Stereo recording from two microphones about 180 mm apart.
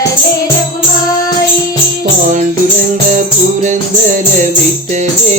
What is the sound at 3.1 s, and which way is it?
Music, 45° right (ahead or behind).